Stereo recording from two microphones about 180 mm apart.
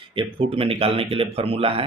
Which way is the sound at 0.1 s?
30° right (ahead or behind).